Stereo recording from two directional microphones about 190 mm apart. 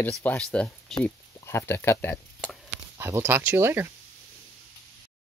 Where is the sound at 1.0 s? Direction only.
15° left (ahead or behind).